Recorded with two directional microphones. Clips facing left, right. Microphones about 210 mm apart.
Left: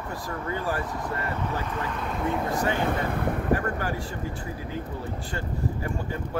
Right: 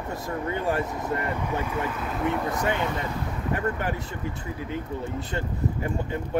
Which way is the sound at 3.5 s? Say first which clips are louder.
Right 1 dB; 20° right (ahead or behind).